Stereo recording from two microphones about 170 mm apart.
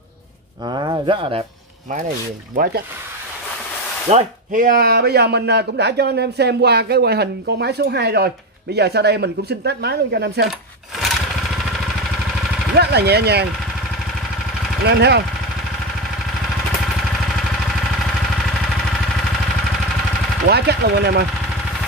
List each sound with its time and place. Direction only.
0.7 s speech: 25° right (ahead or behind)
2.5 s speech: 55° right (ahead or behind)
4.1 s speech: 50° right (ahead or behind); by 10.5 s 75° right (ahead or behind)
11.0 s lawn mower: centre (ahead or behind)
12.7 s speech: 70° right (ahead or behind)
14.9 s speech: 80° right
20.4 s speech: 70° right (ahead or behind)